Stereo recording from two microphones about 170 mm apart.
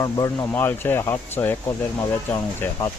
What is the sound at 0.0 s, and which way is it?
Speech, 20° left (ahead or behind).